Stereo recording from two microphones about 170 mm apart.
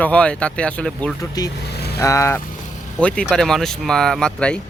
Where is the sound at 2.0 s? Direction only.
15° left (ahead or behind).